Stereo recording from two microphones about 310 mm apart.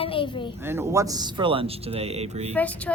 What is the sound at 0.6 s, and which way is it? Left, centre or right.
Speech, centre.